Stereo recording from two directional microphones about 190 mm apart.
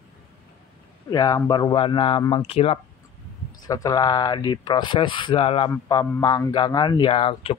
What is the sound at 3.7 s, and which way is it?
A man's voice, 20° left (ahead or behind).